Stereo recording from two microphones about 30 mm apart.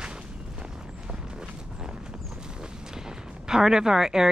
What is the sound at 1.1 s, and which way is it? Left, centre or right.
Walk, right.